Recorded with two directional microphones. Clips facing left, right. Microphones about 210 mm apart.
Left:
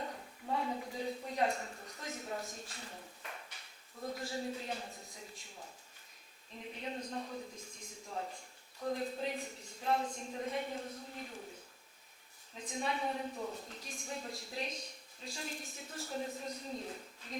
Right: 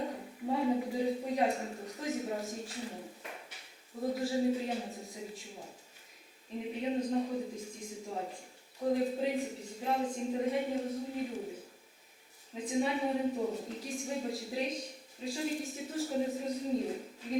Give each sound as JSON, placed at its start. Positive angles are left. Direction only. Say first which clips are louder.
{"t": 0.0, "sound": "a sound", "louder": "right 7 dB", "side_deg": -10}
{"t": 1.9, "sound": "a woman's voice", "louder": "right 8 dB", "side_deg": -5}
{"t": 3.2, "sound": "a sound", "louder": "right 3 dB", "side_deg": -10}
{"t": 5.1, "sound": "a woman's voice", "louder": "right 9 dB", "side_deg": -5}
{"t": 6.5, "sound": "a woman's voice", "louder": "right 9 dB", "side_deg": -10}
{"t": 12.5, "sound": "a woman's voice", "louder": "right 7 dB", "side_deg": -5}
{"t": 13.3, "sound": "a woman's voice", "louder": "right 8 dB", "side_deg": -25}
{"t": 13.7, "sound": "a woman's voice", "louder": "right 8 dB", "side_deg": -5}